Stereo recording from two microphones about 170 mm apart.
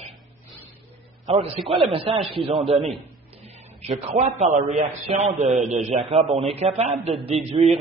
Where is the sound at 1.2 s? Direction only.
35° right (ahead or behind).